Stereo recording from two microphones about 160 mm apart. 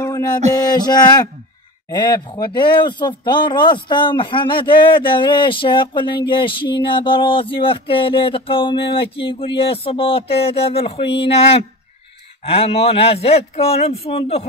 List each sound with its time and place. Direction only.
0.0 s music: 20° left (ahead or behind)
0.6 s a sound: 25° left (ahead or behind)
1.9 s speech: 25° left (ahead or behind)